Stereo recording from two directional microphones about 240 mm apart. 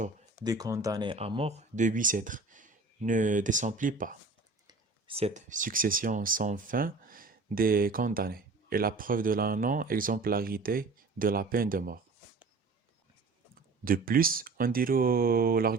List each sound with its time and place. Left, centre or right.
0.4 s speech: centre; by 11.9 s right
13.8 s speech: right